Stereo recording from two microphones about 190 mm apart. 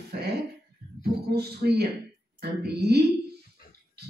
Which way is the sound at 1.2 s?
60° right (ahead or behind).